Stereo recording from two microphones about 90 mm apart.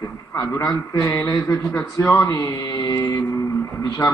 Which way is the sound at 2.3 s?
45° left (ahead or behind).